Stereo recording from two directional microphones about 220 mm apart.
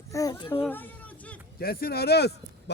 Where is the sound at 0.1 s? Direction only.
15° left (ahead or behind).